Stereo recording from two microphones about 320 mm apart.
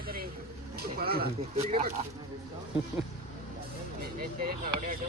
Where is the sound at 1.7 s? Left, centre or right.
Centre.